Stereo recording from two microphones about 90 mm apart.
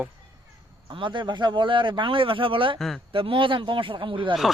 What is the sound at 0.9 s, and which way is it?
Speech, 65° right (ahead or behind).